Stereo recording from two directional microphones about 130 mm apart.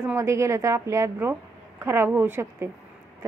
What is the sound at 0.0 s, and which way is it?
A woman's voice, 20° right (ahead or behind).